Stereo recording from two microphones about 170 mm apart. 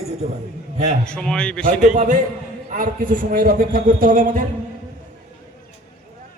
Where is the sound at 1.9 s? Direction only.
50° right (ahead or behind).